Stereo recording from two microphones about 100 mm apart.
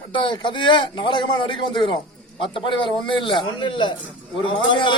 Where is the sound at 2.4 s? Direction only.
55° left (ahead or behind).